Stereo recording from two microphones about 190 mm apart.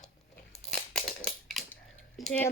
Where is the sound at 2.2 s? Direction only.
5° left (ahead or behind).